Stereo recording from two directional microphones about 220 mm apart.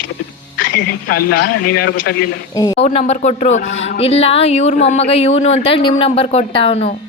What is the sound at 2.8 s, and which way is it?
A man's voice, 30° left (ahead or behind).